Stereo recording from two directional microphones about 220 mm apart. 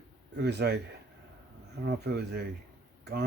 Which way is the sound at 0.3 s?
50° right (ahead or behind).